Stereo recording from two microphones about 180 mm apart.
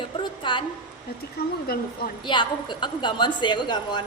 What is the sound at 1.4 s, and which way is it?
Speech, 55° left (ahead or behind).